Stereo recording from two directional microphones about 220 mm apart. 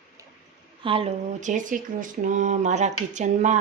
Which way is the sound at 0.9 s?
25° right (ahead or behind).